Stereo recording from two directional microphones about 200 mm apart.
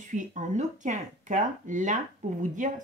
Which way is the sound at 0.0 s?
40° right (ahead or behind).